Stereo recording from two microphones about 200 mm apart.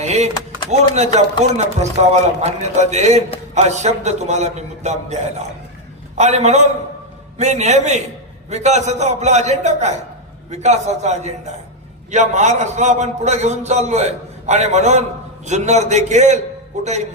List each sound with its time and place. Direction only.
0.0 s a man's voice: 35° right (ahead or behind)